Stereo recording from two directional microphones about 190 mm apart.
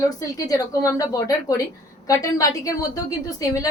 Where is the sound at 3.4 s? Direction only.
20° left (ahead or behind).